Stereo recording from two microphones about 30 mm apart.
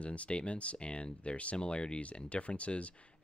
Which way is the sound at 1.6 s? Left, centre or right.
Left.